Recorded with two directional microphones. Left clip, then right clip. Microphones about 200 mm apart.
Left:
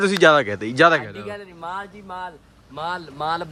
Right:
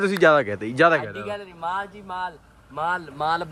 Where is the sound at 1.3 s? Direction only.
35° right (ahead or behind).